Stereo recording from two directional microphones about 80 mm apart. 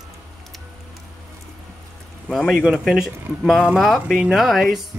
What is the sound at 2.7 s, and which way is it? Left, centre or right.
Speech, centre.